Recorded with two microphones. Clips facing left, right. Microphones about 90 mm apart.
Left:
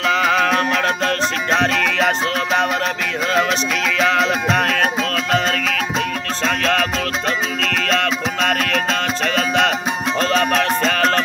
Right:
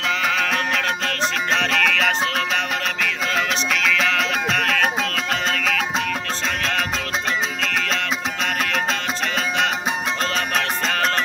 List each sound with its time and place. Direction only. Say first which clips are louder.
0.1 s music: left 6 dB; 45° left (ahead or behind)
6.4 s music: left 8 dB; 65° left (ahead or behind)